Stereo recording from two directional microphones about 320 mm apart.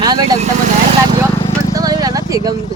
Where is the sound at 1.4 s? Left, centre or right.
Centre.